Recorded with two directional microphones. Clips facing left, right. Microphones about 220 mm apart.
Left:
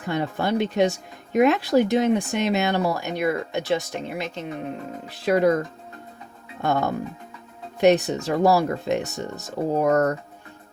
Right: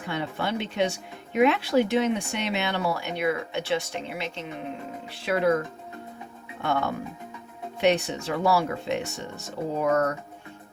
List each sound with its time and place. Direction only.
0.1 s speech: 40° left (ahead or behind)
6.6 s speech: 40° left (ahead or behind)